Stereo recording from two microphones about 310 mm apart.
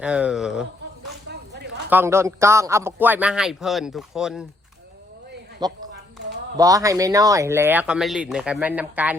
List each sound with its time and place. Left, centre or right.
0.0 s a man's voice: centre
1.3 s zipper: right
1.9 s a man's voice: centre
5.6 s a man's voice: centre